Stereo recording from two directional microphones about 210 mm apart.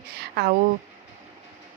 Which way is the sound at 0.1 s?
50° right (ahead or behind).